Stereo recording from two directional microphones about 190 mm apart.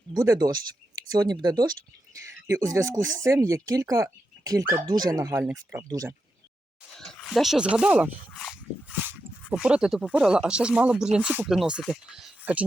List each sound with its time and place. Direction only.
0.1 s speech: 20° right (ahead or behind)
6.9 s a sound: centre (ahead or behind)
9.5 s speech: 5° right (ahead or behind)